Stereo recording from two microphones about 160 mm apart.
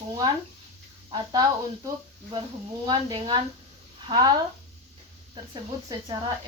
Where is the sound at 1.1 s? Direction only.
25° right (ahead or behind).